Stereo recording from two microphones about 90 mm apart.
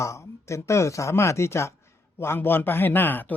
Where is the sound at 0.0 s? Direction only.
35° left (ahead or behind).